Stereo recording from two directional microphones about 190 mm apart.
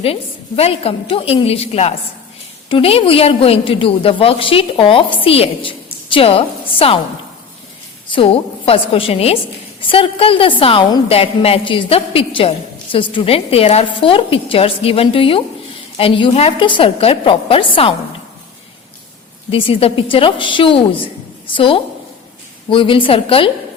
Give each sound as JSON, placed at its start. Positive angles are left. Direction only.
{"t": 0.0, "sound": "a woman's voice", "side_deg": 30}
{"t": 8.1, "sound": "a woman's voice", "side_deg": 30}
{"t": 19.5, "sound": "a woman's voice", "side_deg": 30}